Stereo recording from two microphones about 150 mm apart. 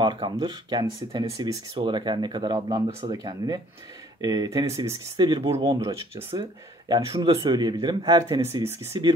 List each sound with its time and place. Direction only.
0.0 s speech: 30° right (ahead or behind)